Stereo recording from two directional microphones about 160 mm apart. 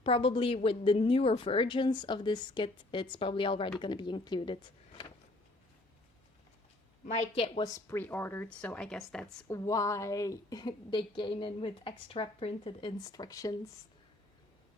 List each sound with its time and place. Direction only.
0.0 s a woman's voice: 35° left (ahead or behind)
7.0 s a woman's voice: 45° left (ahead or behind)
7.6 s speech: 20° left (ahead or behind)
9.5 s a woman's voice: 20° left (ahead or behind)